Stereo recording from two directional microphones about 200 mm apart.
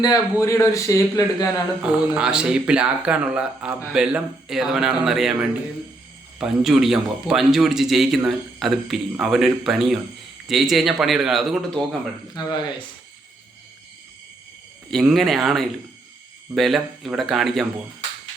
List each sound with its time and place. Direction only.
0.0 s a man's voice: 15° left (ahead or behind)
1.8 s speech: 5° right (ahead or behind)
12.3 s speech: 20° left (ahead or behind)
14.8 s speech: centre (ahead or behind)